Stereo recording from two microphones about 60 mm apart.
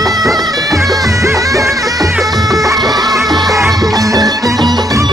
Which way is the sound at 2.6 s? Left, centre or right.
Right.